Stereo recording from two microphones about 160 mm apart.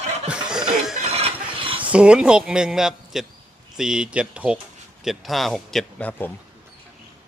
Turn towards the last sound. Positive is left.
turn(degrees=10)  # may be behind; listen again after turning